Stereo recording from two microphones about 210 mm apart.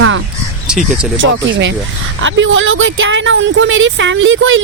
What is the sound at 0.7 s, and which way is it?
Speech, centre (ahead or behind).